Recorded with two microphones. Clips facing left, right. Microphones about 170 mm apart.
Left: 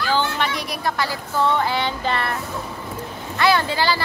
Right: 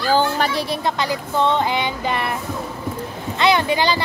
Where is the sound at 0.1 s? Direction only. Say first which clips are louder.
Right 5 dB; 40° right (ahead or behind); by 2.3 s 15° right (ahead or behind).